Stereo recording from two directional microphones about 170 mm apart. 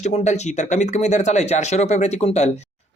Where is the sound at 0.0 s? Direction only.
40° left (ahead or behind).